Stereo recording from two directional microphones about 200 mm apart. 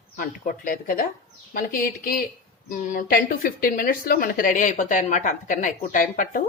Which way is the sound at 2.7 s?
45° left (ahead or behind).